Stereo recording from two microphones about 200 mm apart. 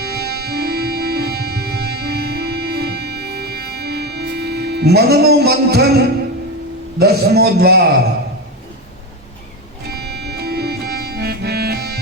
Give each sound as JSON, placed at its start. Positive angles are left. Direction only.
{"t": 0.0, "sound": "music", "side_deg": -55}
{"t": 7.0, "sound": "a man's voice", "side_deg": -50}
{"t": 9.9, "sound": "music", "side_deg": -55}